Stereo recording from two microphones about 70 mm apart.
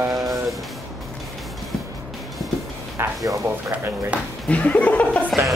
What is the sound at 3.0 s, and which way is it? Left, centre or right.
Speech, right.